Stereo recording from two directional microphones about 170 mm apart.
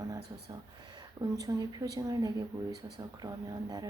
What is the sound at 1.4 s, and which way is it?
A woman's voice, 20° right (ahead or behind).